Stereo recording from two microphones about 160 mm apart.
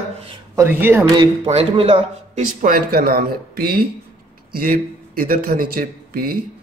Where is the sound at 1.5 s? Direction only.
40° right (ahead or behind).